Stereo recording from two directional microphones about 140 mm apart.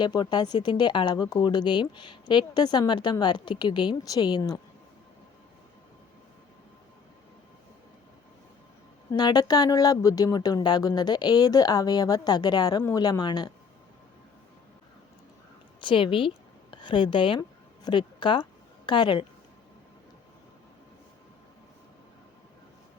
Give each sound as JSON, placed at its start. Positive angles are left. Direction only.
{"t": 0.0, "sound": "speech", "side_deg": 30}
{"t": 9.1, "sound": "speech", "side_deg": 30}
{"t": 15.8, "sound": "a woman's voice", "side_deg": 35}